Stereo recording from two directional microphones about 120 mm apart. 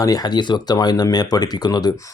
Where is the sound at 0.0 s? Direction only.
30° left (ahead or behind).